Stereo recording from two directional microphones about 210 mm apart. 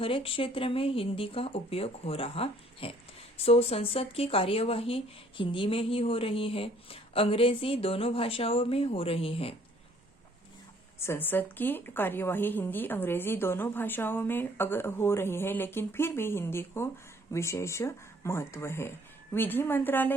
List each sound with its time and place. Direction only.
0.0 s speech: 25° left (ahead or behind)
11.0 s a woman's voice: 10° left (ahead or behind)